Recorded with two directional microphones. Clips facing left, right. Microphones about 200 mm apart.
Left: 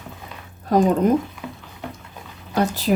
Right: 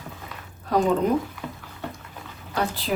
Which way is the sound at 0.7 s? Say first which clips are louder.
Left 5 dB; 45° left (ahead or behind).